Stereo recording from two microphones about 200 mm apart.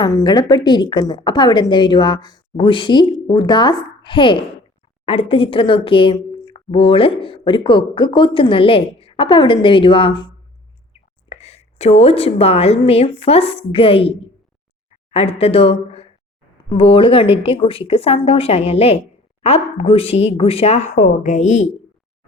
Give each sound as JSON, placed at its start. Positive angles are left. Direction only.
{"t": 0.0, "sound": "a woman's voice", "side_deg": 20}